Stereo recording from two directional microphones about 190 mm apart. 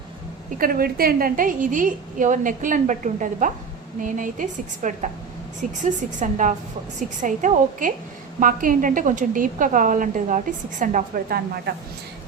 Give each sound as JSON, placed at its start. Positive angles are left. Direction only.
{"t": 0.6, "sound": "a woman's voice", "side_deg": -50}